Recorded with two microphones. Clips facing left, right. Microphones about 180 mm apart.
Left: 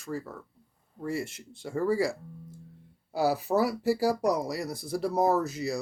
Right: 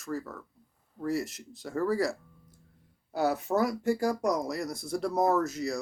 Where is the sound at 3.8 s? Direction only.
35° left (ahead or behind).